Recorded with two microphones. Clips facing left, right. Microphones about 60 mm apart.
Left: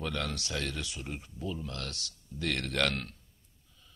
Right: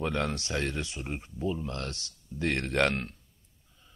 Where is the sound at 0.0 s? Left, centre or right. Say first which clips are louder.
Right 5 dB; right.